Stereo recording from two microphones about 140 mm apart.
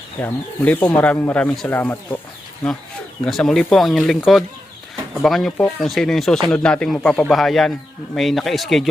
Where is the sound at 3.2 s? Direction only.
5° left (ahead or behind).